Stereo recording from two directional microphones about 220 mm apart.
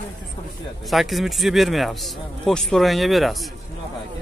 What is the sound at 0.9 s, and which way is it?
Speech, centre (ahead or behind).